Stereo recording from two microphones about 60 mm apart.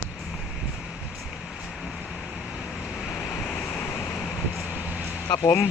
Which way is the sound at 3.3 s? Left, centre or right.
Left.